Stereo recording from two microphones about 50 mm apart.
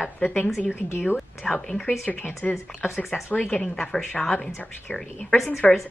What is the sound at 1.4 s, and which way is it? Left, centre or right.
A woman's voice, centre.